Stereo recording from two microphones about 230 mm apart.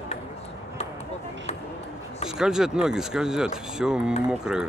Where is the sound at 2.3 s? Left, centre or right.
Centre.